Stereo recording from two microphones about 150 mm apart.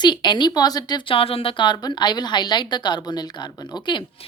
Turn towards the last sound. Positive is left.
turn(degrees=30)  # may be behind; listen again after turning